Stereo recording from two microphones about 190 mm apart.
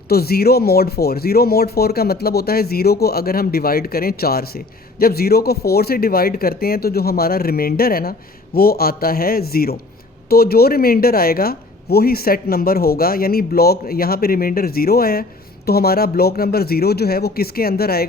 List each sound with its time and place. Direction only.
0.1 s speech: 55° left (ahead or behind)